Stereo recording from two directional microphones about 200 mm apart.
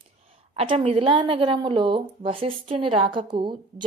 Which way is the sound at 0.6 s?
30° right (ahead or behind).